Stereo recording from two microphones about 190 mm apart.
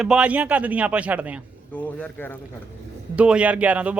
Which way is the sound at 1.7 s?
10° left (ahead or behind).